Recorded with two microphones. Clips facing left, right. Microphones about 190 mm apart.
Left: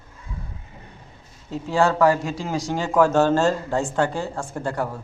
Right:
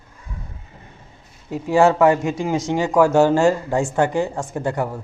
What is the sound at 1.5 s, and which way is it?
Speech, 15° right (ahead or behind).